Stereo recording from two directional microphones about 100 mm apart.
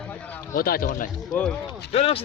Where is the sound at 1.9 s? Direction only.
70° left (ahead or behind).